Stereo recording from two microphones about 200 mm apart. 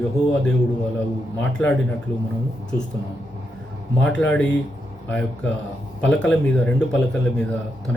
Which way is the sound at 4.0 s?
5° left (ahead or behind).